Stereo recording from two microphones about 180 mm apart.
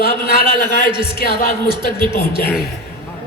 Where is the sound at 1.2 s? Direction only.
55° left (ahead or behind).